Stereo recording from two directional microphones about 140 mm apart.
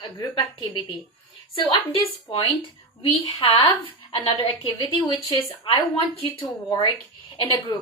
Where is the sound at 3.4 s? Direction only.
35° left (ahead or behind).